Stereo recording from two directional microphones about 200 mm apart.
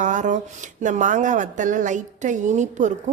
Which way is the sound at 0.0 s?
40° right (ahead or behind).